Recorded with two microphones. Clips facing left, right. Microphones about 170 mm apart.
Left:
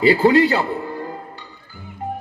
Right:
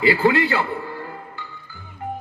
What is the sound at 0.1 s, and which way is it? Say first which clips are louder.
Speech: left 4 dB; 40° left (ahead or behind).